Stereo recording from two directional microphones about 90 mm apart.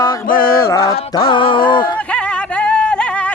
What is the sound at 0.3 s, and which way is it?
Music, 25° left (ahead or behind).